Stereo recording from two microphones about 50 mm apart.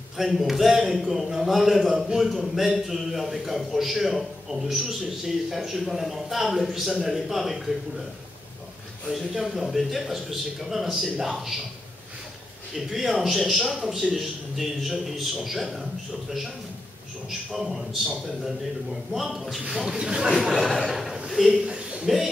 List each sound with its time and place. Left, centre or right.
0.2 s a man's voice: centre
9.0 s a man's voice: centre
12.7 s a man's voice: centre
17.3 s a man's voice: centre
19.1 s a man's voice: centre
20.3 s a man's voice: centre
21.3 s a sound: centre
21.6 s a sound: right
22.0 s a man's voice: centre